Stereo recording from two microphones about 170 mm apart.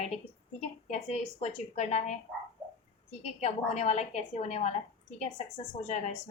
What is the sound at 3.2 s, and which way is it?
A woman's voice, 40° left (ahead or behind).